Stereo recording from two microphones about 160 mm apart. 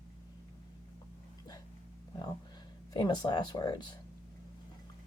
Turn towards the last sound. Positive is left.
turn(degrees=25)  # may be behind; listen again after turning